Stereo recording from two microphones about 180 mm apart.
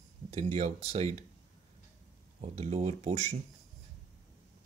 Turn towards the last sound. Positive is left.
turn(degrees=-35)  # may be behind; listen again after turning